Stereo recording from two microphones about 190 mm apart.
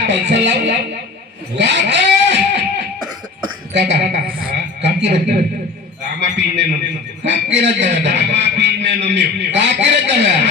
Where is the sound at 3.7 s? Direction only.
65° right (ahead or behind).